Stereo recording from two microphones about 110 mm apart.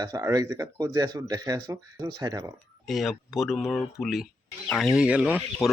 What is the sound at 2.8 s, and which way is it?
Speech, centre (ahead or behind).